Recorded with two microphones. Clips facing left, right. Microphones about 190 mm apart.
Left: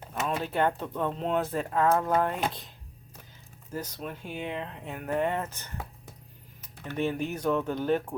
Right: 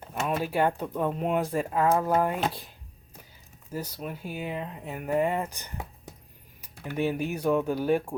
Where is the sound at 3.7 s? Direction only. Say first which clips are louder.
Right 1 dB; 10° right (ahead or behind).